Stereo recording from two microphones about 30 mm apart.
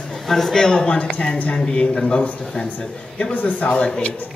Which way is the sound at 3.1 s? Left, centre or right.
Left.